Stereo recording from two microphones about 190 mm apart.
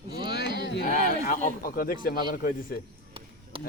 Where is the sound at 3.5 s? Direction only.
30° right (ahead or behind).